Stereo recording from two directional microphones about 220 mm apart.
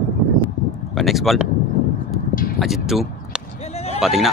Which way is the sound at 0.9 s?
Centre (ahead or behind).